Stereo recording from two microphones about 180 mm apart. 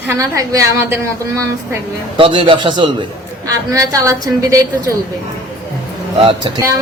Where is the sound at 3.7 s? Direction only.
20° right (ahead or behind).